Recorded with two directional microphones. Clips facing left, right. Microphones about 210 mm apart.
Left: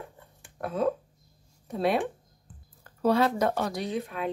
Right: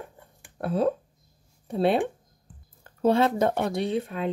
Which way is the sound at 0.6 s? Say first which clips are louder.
Right 3 dB; 30° right (ahead or behind).